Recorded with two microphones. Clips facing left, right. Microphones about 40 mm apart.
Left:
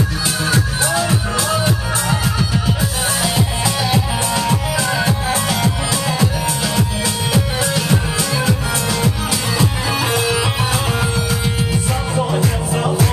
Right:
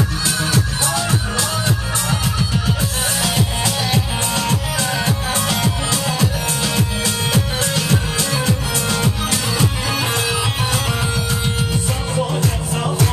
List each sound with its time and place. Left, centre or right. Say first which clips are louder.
0.5 s music: left 2 dB; left
2.3 s music: left 2 dB; centre
7.3 s music: left 2 dB; centre
8.2 s music: left 1 dB; centre
12.7 s music: left 3 dB; centre